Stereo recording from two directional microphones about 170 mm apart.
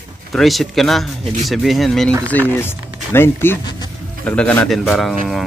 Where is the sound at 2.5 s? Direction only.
15° left (ahead or behind).